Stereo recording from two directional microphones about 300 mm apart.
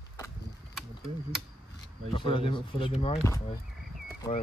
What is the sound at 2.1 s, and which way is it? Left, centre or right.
Speech, centre.